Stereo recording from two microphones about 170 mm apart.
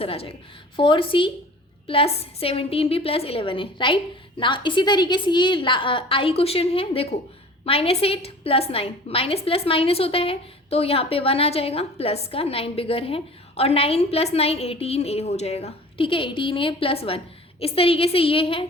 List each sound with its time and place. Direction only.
0.0 s a woman's voice: 35° left (ahead or behind)